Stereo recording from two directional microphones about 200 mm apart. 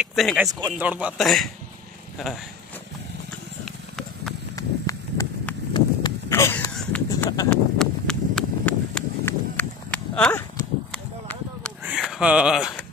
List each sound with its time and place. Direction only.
0.0 s speech: centre (ahead or behind)
0.5 s a man's voice: 15° right (ahead or behind); by 1.5 s centre (ahead or behind)
3.6 s horse: centre (ahead or behind)
4.6 s run: 15° left (ahead or behind)
5.7 s a sound: 20° left (ahead or behind)
7.4 s a sound: 5° left (ahead or behind)
12.0 s speech: 5° right (ahead or behind)